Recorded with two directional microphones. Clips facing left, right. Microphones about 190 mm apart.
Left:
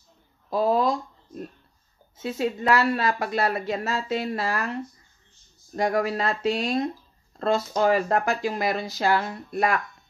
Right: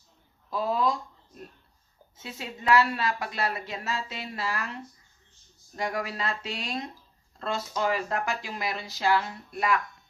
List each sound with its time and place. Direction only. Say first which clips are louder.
0.5 s speech: left 5 dB; 40° left (ahead or behind)
2.2 s a woman's voice: left 5 dB; 45° left (ahead or behind)
5.8 s a woman's voice: left 8 dB; 45° left (ahead or behind)